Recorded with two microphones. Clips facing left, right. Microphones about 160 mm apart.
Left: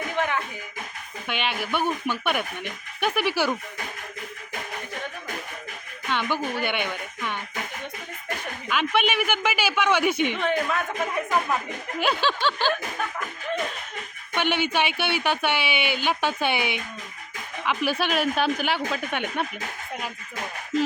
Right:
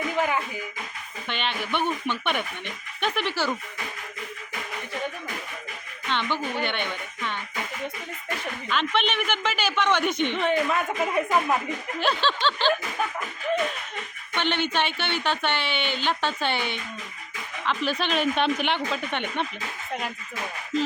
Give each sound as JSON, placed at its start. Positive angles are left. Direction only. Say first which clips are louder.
{"t": 0.2, "sound": "a sound", "louder": "even", "side_deg": -5}
{"t": 1.3, "sound": "speech", "louder": "left 1 dB", "side_deg": 10}
{"t": 6.1, "sound": "a woman's voice", "louder": "left 1 dB", "side_deg": 10}
{"t": 8.7, "sound": "speech", "louder": "left 2 dB", "side_deg": 10}
{"t": 10.4, "sound": "a woman's voice", "louder": "right 1 dB", "side_deg": 0}
{"t": 11.9, "sound": "speech", "louder": "left 1 dB", "side_deg": 10}
{"t": 14.3, "sound": "a woman's voice", "louder": "left 2 dB", "side_deg": 10}